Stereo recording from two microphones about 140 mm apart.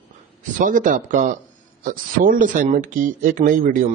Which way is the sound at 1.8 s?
80° right.